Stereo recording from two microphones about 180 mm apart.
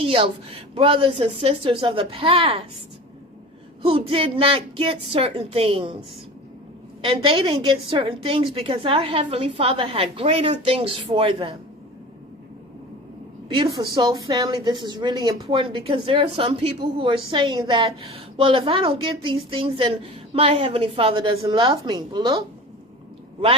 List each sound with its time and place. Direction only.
0.0 s a woman's voice: 30° right (ahead or behind)
3.8 s a woman's voice: 30° right (ahead or behind)
7.0 s a woman's voice: 30° right (ahead or behind)
13.7 s a woman's voice: 25° right (ahead or behind)